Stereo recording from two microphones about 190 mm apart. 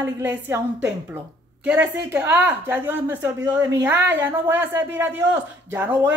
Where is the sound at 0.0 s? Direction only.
10° right (ahead or behind).